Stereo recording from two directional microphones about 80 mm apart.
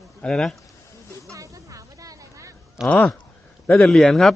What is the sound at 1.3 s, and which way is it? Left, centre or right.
Vehicle, right.